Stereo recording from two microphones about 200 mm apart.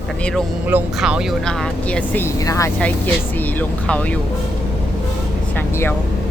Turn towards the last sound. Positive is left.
turn(degrees=10)  # may be behind; listen again after turning